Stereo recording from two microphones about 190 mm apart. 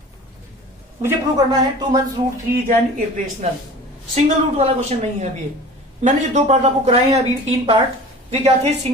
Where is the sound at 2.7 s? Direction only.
45° right (ahead or behind).